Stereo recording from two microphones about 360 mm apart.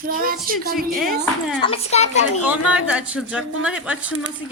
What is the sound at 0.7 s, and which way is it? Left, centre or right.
Speech, centre.